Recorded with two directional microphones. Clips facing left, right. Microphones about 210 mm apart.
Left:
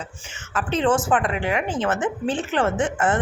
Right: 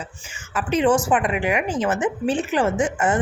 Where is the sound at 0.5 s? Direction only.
10° right (ahead or behind).